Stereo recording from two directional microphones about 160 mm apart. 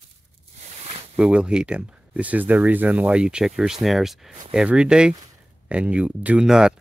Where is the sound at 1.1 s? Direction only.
5° right (ahead or behind).